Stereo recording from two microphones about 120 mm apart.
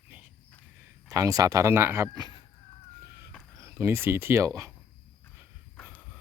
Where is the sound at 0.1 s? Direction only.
15° right (ahead or behind).